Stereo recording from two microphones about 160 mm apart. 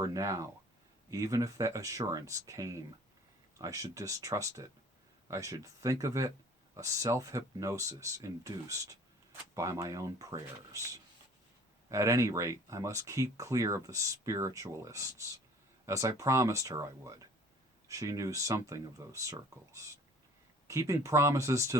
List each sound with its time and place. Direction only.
0.0 s speech: 20° right (ahead or behind)